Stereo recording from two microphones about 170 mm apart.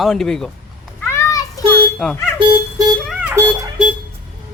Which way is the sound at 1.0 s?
15° left (ahead or behind).